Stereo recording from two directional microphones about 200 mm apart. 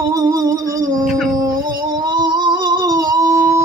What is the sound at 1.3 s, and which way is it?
Music, 20° right (ahead or behind).